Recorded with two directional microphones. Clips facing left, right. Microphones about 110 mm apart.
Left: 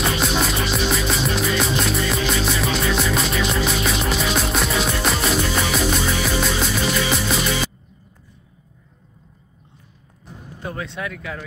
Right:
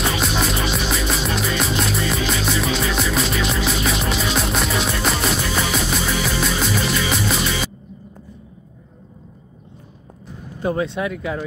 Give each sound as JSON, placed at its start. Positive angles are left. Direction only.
{"t": 0.0, "sound": "music", "side_deg": 0}
{"t": 10.6, "sound": "speech", "side_deg": -20}